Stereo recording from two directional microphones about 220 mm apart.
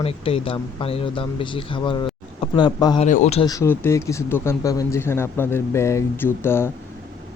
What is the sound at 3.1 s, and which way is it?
Speech, 30° left (ahead or behind).